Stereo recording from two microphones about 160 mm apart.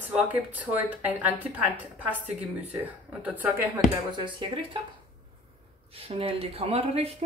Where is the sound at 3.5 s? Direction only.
15° right (ahead or behind).